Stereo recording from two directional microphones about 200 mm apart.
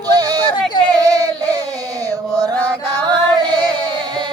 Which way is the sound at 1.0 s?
20° right (ahead or behind).